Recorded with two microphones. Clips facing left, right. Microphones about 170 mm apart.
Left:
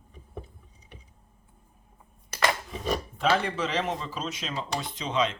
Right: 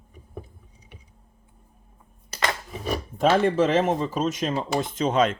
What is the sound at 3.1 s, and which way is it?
Speech, 45° right (ahead or behind).